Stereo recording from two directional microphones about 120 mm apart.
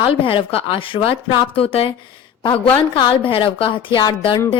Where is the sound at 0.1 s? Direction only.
50° left (ahead or behind).